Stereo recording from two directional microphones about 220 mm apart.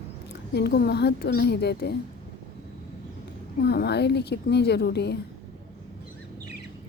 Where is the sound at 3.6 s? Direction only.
50° left (ahead or behind).